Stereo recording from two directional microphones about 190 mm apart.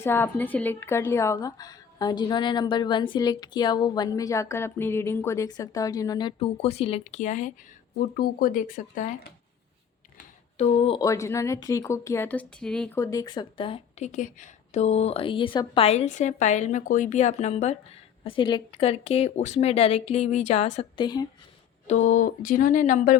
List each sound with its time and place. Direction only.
0.0 s a woman's voice: 10° left (ahead or behind); by 7.5 s 40° left (ahead or behind)
7.9 s speech: 50° left (ahead or behind)
10.6 s speech: 30° left (ahead or behind)
11.0 s speech: 15° left (ahead or behind)
13.0 s speech: 15° left (ahead or behind); by 21.0 s 35° left (ahead or behind)
21.0 s a woman's voice: 20° left (ahead or behind)
21.8 s speech: 40° left (ahead or behind)